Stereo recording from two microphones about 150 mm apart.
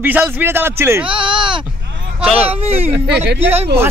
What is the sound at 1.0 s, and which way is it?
Speech, 35° right (ahead or behind).